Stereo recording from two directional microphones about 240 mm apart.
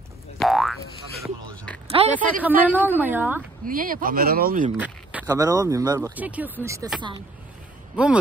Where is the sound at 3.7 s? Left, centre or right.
Right.